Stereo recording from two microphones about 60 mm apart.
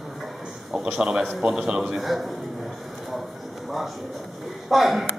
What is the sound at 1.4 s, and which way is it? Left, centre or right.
Speech, centre.